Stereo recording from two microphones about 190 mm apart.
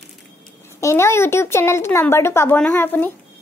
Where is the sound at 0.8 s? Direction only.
15° left (ahead or behind).